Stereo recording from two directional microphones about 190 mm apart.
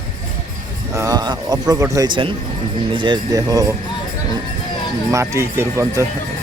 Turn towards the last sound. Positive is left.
turn(degrees=-15)  # may be behind; listen again after turning